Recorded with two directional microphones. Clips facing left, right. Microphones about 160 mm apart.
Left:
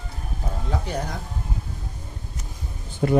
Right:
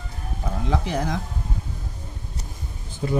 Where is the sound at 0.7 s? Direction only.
90° right.